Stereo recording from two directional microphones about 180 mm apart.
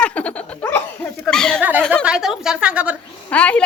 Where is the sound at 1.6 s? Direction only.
10° right (ahead or behind).